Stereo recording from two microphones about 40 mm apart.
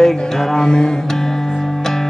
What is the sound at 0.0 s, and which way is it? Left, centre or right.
Music, centre.